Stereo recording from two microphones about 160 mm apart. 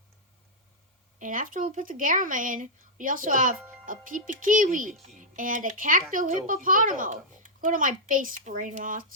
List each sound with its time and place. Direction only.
1.2 s speech: 55° right (ahead or behind)